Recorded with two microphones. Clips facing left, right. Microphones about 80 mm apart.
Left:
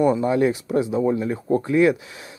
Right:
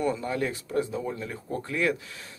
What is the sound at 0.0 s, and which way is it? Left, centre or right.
Speech, centre.